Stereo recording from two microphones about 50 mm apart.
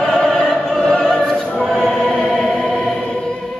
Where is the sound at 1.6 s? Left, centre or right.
Centre.